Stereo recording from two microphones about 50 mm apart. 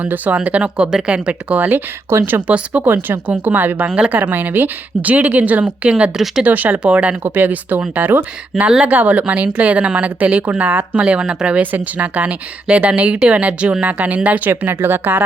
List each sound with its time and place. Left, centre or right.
0.0 s a woman's voice: right
2.1 s speech: right
2.5 s a woman's voice: right
3.8 s speech: right
4.1 s a woman's voice: right
6.4 s a woman's voice: right
7.3 s a woman's voice: right
11.0 s speech: right
11.6 s a woman's voice: right
14.6 s speech: right